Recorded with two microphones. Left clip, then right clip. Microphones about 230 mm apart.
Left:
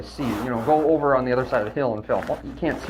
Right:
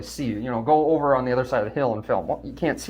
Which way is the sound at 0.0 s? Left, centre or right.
Right.